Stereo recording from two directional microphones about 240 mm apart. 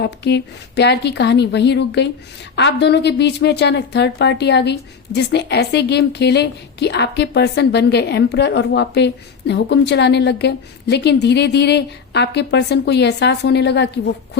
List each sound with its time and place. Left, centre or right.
0.0 s a woman's voice: left